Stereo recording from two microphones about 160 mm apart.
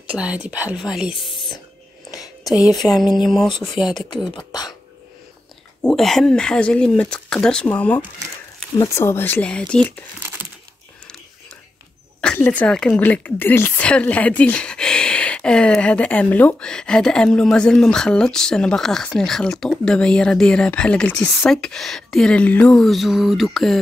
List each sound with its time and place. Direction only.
0.1 s speech: 10° right (ahead or behind)
2.8 s a woman's voice: 5° left (ahead or behind)
4.4 s speech: 25° left (ahead or behind)
5.8 s a woman's voice: 5° left (ahead or behind)
8.7 s speech: 20° left (ahead or behind)
12.2 s a woman's voice: 10° left (ahead or behind)